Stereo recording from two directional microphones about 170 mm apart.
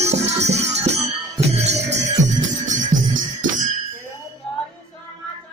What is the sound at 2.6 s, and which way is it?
Music, 45° right (ahead or behind).